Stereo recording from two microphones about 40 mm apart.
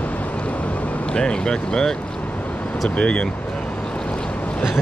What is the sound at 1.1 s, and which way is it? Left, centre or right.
Speech, centre.